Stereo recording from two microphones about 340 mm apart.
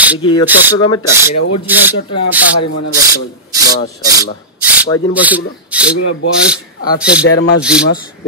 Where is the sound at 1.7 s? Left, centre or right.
Centre.